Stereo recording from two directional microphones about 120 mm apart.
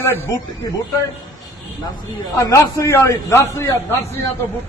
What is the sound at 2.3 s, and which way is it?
A man's voice, 30° left (ahead or behind).